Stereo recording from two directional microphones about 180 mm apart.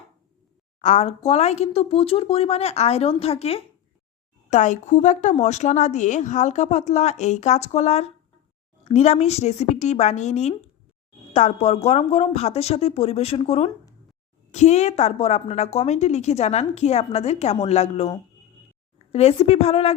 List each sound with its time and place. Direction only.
0.8 s a woman's voice: 40° left (ahead or behind)
19.1 s a woman's voice: 35° left (ahead or behind)